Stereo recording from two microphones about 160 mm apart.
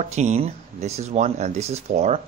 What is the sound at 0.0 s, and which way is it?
Speech, 45° right (ahead or behind).